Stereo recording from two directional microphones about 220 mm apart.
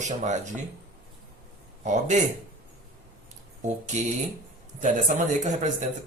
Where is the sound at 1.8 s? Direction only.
35° right (ahead or behind).